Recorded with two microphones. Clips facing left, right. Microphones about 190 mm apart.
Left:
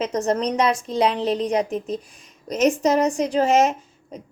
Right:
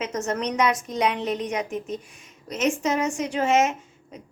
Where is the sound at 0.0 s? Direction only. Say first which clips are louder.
Left 5 dB; 35° left (ahead or behind).